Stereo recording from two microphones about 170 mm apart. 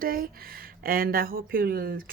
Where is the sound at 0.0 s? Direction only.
60° right (ahead or behind).